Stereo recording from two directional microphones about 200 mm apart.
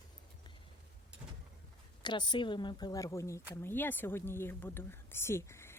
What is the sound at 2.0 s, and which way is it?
A woman's voice, 25° left (ahead or behind).